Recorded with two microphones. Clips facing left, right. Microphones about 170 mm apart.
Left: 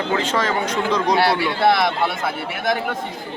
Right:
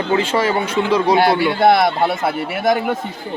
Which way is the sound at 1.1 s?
25° right (ahead or behind).